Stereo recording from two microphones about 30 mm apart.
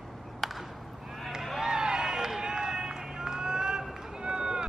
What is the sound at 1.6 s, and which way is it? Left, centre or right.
Run, right.